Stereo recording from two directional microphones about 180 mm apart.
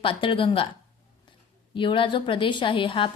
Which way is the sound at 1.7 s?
30° left (ahead or behind).